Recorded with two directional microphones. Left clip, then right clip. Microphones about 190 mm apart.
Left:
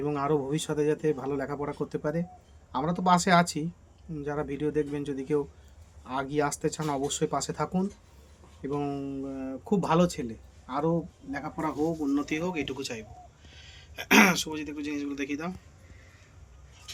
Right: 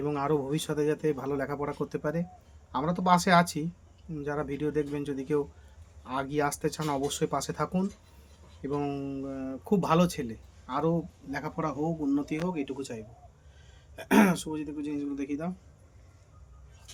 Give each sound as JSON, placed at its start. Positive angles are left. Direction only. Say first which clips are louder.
{"t": 0.0, "sound": "speech", "louder": "left 1 dB", "side_deg": 0}
{"t": 11.3, "sound": "speech", "louder": "right 1 dB", "side_deg": -35}
{"t": 12.1, "sound": "a man's voice", "louder": "left 1 dB", "side_deg": -60}